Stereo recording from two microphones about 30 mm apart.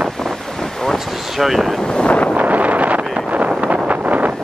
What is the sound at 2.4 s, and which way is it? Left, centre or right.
Wind noise, right.